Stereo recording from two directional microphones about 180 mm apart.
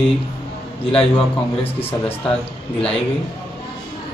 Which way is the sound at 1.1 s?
30° left (ahead or behind).